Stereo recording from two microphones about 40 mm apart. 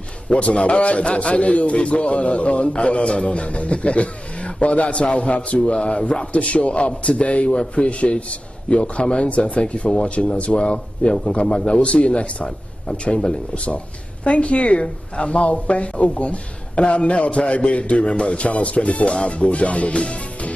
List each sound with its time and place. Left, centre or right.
0.3 s a man's voice: left